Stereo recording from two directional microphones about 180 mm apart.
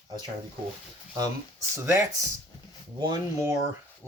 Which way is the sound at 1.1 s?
20° right (ahead or behind).